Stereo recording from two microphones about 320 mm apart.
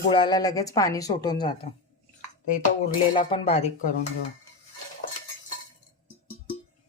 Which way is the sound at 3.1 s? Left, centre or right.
Centre.